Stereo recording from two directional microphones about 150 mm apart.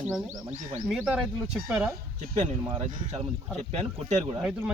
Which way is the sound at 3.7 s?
45° right (ahead or behind).